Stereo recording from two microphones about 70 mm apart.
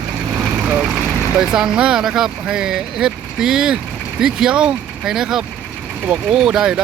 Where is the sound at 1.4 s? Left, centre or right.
Centre.